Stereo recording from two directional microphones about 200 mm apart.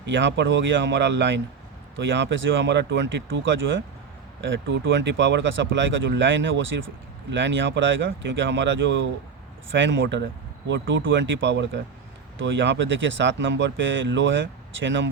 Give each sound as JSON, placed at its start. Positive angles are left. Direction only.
{"t": 0.0, "sound": "speech", "side_deg": -65}